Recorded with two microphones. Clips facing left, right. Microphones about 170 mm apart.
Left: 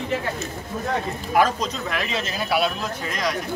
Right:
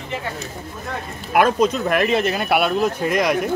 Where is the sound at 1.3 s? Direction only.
60° right (ahead or behind).